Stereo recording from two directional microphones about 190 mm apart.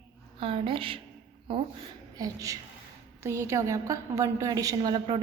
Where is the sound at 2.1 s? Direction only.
20° right (ahead or behind).